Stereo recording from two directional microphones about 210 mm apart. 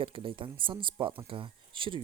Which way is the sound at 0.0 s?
25° right (ahead or behind).